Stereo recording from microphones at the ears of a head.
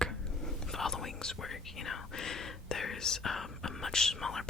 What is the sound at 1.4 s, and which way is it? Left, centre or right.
Speech, left.